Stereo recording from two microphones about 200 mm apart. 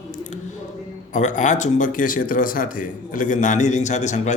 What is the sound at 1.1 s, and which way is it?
Speech, 40° left (ahead or behind).